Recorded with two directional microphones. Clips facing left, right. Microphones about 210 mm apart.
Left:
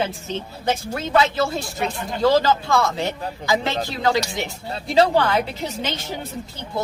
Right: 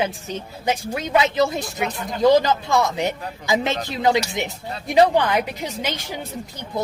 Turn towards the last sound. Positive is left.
turn(degrees=-10)  # may be behind; listen again after turning